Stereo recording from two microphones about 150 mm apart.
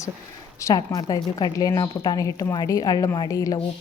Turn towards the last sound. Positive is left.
turn(degrees=20)  # may be behind; listen again after turning